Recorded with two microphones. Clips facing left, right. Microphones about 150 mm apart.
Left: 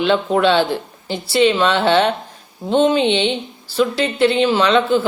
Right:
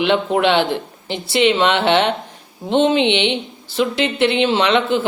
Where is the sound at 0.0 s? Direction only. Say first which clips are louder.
Left 1 dB; 20° right (ahead or behind).